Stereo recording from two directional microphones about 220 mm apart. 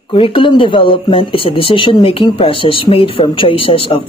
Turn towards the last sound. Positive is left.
turn(degrees=25)  # may be behind; listen again after turning